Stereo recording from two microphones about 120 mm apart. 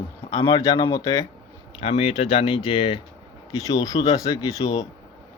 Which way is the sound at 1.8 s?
55° left (ahead or behind).